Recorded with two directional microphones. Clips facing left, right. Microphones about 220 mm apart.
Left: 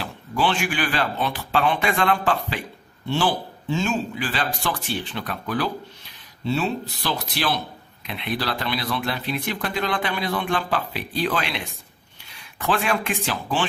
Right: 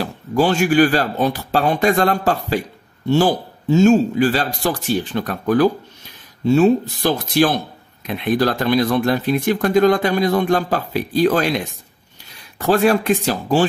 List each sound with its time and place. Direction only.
0.0 s speech: 40° right (ahead or behind)